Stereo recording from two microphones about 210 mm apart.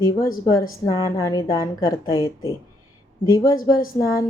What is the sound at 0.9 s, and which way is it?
Speech, 15° left (ahead or behind).